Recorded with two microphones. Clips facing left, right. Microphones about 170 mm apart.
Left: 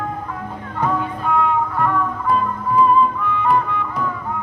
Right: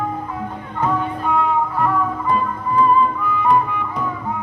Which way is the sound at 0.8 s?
Centre (ahead or behind).